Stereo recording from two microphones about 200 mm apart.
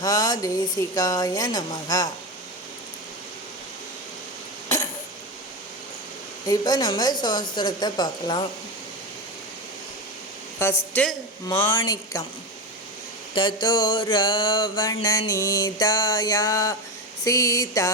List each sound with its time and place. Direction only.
0.0 s a woman's voice: 20° left (ahead or behind)
6.5 s mantra: 20° left (ahead or behind)
10.6 s speech: 10° left (ahead or behind)
13.3 s mantra: 20° left (ahead or behind)
17.2 s speech: 15° left (ahead or behind)